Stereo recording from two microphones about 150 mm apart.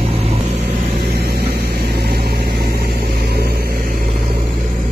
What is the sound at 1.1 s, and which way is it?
Vehicle, 90° right.